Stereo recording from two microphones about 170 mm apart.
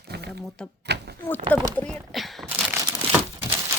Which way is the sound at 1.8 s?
5° left (ahead or behind).